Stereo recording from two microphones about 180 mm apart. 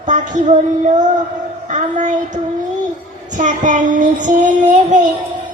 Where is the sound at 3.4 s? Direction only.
45° right (ahead or behind).